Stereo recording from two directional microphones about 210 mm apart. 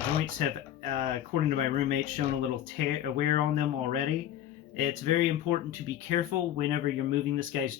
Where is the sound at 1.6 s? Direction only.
40° right (ahead or behind).